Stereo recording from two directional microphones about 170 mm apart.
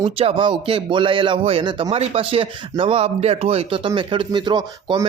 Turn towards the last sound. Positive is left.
turn(degrees=-25)  # may be behind; listen again after turning